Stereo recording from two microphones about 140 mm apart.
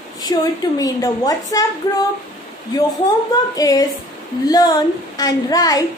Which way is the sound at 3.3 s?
25° left (ahead or behind).